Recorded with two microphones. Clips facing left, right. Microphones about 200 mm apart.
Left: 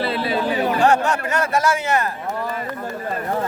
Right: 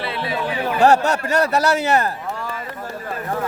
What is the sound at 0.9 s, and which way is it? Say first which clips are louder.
A man's voice: right 2 dB; 40° right (ahead or behind).